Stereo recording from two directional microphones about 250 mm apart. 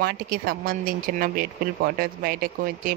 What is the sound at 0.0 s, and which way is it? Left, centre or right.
Speech, right.